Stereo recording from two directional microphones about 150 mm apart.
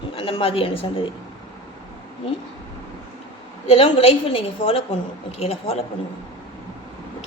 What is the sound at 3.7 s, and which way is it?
A woman's voice, 40° left (ahead or behind).